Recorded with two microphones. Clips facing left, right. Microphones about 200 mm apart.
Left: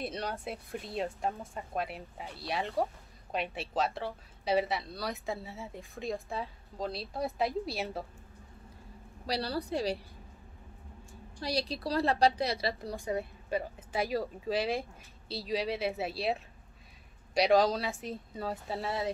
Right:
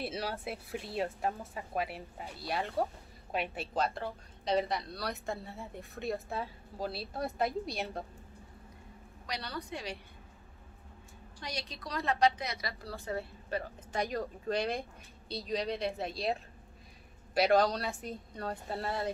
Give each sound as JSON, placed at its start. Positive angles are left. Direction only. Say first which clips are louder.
{"t": 0.0, "sound": "speech", "louder": "even", "side_deg": -5}
{"t": 9.2, "sound": "a woman's voice", "louder": "left 7 dB", "side_deg": 30}
{"t": 11.4, "sound": "a woman's voice", "louder": "left 9 dB", "side_deg": 35}
{"t": 12.9, "sound": "speech", "louder": "left 3 dB", "side_deg": 15}